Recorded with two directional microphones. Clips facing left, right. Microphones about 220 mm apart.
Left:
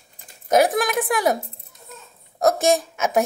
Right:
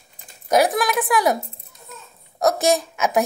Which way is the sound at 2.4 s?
50° left (ahead or behind).